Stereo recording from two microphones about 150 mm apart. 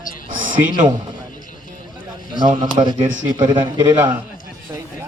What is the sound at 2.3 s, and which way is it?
A man's voice, 30° right (ahead or behind).